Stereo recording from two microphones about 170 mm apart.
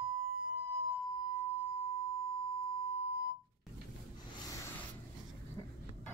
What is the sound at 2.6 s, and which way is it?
Beep, 35° left (ahead or behind).